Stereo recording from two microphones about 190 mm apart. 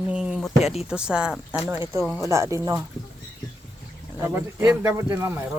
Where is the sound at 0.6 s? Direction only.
35° left (ahead or behind).